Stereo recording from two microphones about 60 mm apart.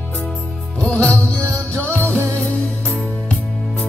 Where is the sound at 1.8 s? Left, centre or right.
Left.